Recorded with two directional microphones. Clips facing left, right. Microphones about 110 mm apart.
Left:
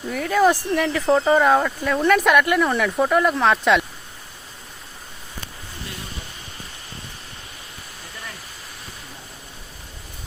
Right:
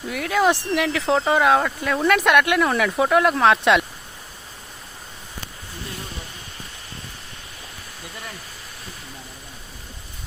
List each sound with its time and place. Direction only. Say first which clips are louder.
0.1 s speech: left 2 dB; centre (ahead or behind)